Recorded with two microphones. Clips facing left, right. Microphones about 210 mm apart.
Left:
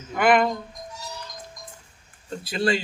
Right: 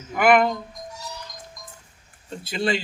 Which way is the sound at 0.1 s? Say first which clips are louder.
Right 2 dB; 5° right (ahead or behind).